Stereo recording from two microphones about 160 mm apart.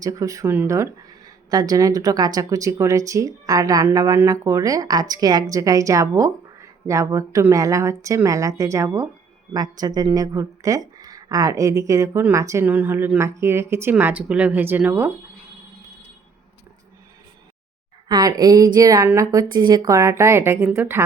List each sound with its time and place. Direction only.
0.0 s speech: 20° right (ahead or behind)
18.1 s speech: 20° right (ahead or behind)